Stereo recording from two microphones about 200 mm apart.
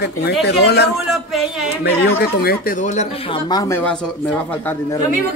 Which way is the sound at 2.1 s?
50° left (ahead or behind).